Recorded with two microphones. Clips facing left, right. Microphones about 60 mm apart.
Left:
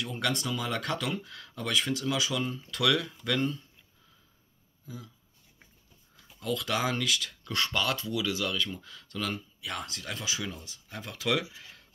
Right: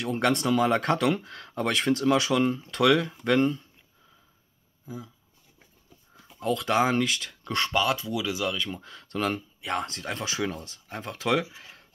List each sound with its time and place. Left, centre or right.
0.0 s speech: right
4.8 s speech: right
6.1 s speech: right
7.7 s speech: centre
8.7 s speech: right
10.9 s speech: right